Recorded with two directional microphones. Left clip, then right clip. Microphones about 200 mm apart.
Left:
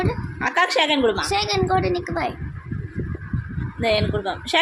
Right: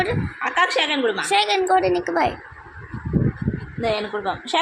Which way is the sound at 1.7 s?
10° right (ahead or behind).